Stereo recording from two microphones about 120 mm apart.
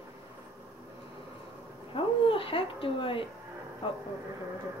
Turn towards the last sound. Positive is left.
turn(degrees=45)  # may be behind; listen again after turning